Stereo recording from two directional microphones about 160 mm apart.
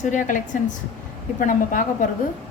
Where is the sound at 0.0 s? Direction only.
50° left (ahead or behind).